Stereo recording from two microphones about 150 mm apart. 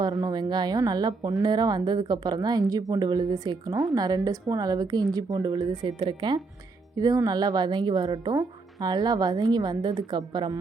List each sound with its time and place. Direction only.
0.0 s speech: 25° right (ahead or behind)